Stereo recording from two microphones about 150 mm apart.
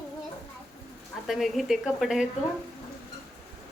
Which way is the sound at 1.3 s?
Centre (ahead or behind).